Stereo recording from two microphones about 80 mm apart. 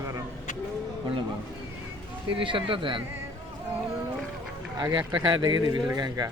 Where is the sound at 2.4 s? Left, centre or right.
Right.